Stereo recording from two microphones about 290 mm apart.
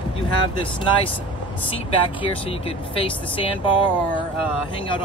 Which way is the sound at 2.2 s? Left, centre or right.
Centre.